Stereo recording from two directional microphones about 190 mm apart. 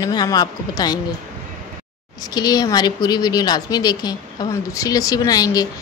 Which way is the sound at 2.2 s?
20° left (ahead or behind).